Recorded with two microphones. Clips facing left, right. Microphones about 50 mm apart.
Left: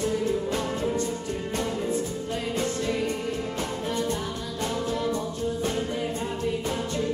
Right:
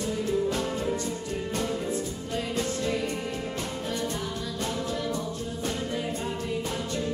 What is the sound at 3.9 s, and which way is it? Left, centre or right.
Music, left.